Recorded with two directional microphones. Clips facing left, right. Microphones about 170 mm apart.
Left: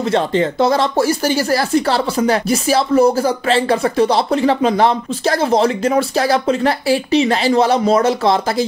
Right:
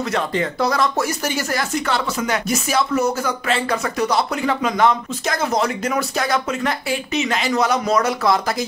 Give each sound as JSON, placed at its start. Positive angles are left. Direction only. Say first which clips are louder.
{"t": 0.1, "sound": "speech", "louder": "left 6 dB", "side_deg": 30}